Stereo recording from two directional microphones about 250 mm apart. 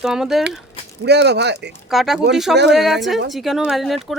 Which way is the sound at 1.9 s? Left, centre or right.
Centre.